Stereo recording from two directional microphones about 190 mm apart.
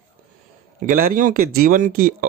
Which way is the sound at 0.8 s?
45° right (ahead or behind).